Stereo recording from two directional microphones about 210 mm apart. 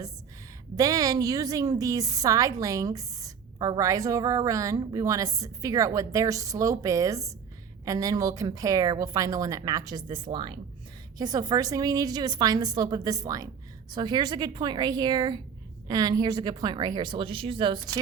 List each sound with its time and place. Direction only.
0.8 s a woman's voice: 15° right (ahead or behind)